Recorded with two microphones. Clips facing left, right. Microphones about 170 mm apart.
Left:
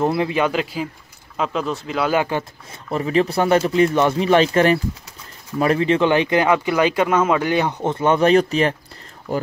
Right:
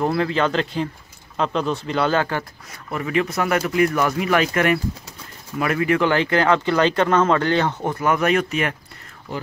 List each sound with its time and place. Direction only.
0.0 s speech: 20° left (ahead or behind)
2.9 s speech: 30° left (ahead or behind); by 7.9 s 15° left (ahead or behind)
7.9 s speech: 25° left (ahead or behind)
9.3 s speech: 45° left (ahead or behind)